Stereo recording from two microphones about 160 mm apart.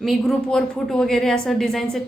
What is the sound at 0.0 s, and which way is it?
A woman's voice, centre (ahead or behind).